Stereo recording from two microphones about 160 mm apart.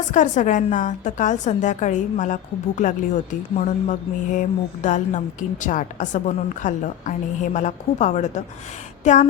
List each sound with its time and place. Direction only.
0.1 s mantra: 50° left (ahead or behind)